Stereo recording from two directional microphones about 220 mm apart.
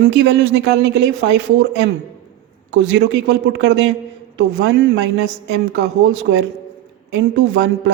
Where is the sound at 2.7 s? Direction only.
55° right (ahead or behind).